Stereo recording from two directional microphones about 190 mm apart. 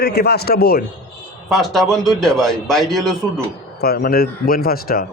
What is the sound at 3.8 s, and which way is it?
A man's voice, 55° left (ahead or behind).